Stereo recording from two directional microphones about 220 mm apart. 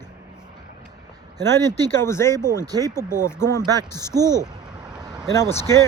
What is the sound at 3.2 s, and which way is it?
Speech, 10° left (ahead or behind).